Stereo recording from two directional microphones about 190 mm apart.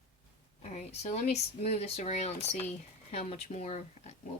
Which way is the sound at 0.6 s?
35° left (ahead or behind).